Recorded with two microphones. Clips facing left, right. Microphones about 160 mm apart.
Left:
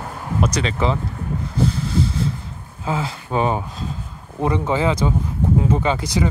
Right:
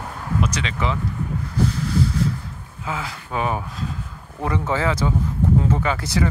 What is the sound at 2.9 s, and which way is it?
Speech, 30° left (ahead or behind).